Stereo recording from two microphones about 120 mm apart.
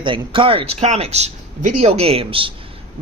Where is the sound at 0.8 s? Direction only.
65° right (ahead or behind); by 2.5 s 50° right (ahead or behind).